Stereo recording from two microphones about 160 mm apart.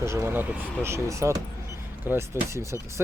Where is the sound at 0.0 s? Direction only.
15° right (ahead or behind).